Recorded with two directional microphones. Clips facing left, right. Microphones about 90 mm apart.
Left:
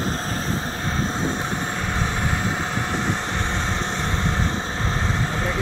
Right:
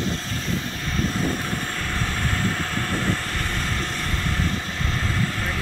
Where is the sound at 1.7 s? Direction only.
20° left (ahead or behind).